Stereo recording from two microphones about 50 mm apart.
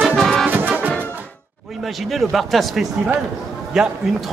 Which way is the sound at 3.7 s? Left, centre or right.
Centre.